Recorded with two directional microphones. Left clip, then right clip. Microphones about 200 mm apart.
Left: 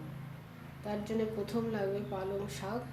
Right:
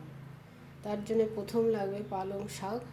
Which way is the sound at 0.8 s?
40° right (ahead or behind).